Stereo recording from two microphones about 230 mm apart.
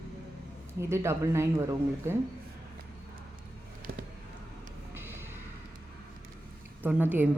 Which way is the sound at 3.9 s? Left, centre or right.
Right.